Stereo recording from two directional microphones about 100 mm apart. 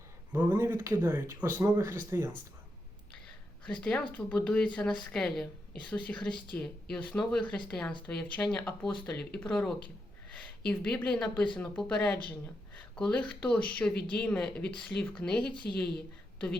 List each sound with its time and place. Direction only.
0.3 s speech: 20° right (ahead or behind)
3.7 s a woman's voice: 10° left (ahead or behind)